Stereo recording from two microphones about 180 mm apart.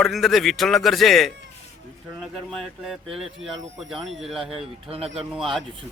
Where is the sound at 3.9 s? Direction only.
Centre (ahead or behind).